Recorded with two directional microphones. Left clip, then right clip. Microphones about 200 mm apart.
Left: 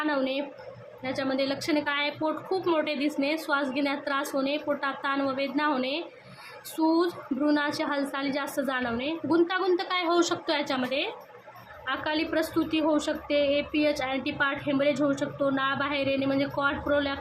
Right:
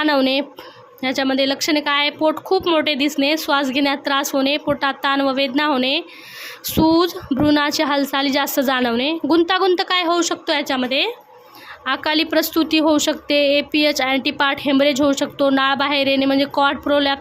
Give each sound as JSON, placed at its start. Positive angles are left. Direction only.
{"t": 0.0, "sound": "a woman's voice", "side_deg": -55}